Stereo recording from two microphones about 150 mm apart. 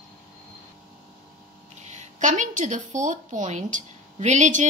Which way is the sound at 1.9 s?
55° right (ahead or behind).